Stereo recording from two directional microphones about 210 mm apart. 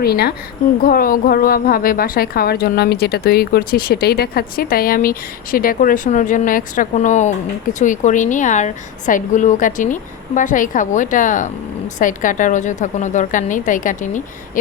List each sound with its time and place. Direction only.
0.0 s a woman's voice: 45° left (ahead or behind)